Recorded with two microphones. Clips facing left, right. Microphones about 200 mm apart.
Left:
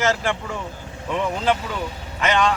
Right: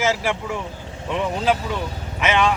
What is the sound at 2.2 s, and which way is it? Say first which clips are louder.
Speech: even; 5° right (ahead or behind).